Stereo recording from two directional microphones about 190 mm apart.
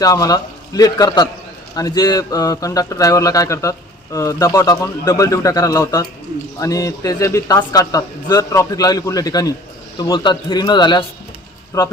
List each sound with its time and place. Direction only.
0.0 s a man's voice: 20° left (ahead or behind)